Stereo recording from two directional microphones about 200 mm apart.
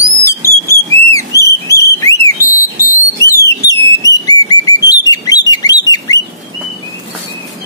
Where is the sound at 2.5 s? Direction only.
15° left (ahead or behind).